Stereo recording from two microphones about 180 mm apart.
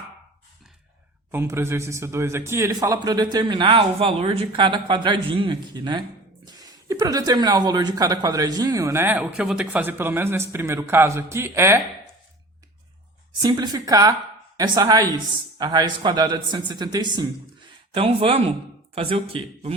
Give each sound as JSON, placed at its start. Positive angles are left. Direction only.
{"t": 1.3, "sound": "a man's voice", "side_deg": -15}
{"t": 13.4, "sound": "a man's voice", "side_deg": -25}